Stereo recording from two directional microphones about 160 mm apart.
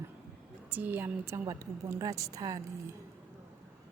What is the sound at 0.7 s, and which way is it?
A woman's voice, 10° right (ahead or behind).